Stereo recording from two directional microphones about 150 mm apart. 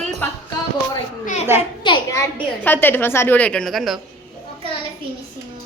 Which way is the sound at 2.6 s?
15° left (ahead or behind).